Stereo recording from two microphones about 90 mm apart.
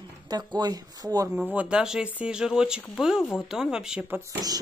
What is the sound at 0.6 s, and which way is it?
Speech, 45° right (ahead or behind).